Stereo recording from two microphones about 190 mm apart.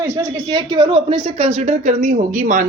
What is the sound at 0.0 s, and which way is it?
Speech, 15° right (ahead or behind).